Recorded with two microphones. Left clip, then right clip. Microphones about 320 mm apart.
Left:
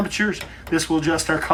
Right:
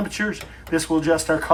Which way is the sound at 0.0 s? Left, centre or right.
Centre.